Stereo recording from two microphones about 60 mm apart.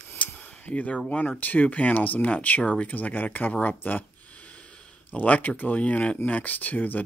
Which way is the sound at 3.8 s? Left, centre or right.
Left.